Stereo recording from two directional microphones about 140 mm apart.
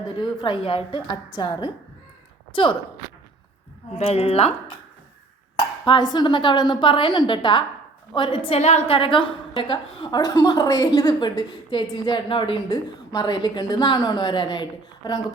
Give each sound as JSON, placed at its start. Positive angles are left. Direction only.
{"t": 0.2, "sound": "a woman's voice", "side_deg": 35}
{"t": 3.9, "sound": "a woman's voice", "side_deg": 45}
{"t": 5.5, "sound": "a woman's voice", "side_deg": 30}